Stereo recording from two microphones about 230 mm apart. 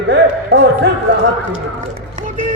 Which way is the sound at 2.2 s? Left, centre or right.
Right.